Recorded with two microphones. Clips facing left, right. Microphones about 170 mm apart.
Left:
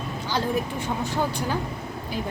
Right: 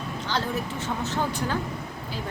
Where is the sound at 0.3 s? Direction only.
15° left (ahead or behind).